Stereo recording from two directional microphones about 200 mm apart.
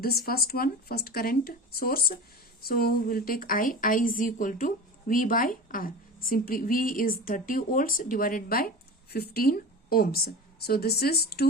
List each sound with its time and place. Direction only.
0.3 s a woman's voice: 50° left (ahead or behind)